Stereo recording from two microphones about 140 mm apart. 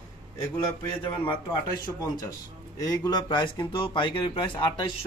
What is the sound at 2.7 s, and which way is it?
Speech, 25° left (ahead or behind).